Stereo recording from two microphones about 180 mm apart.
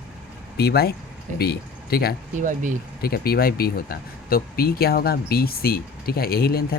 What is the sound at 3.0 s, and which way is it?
Speech, 55° left (ahead or behind).